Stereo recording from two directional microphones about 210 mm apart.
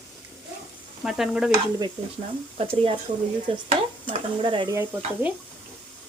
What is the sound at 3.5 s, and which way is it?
Speech, 25° right (ahead or behind).